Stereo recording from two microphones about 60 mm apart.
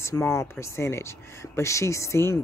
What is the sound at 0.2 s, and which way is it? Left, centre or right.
Speech, left.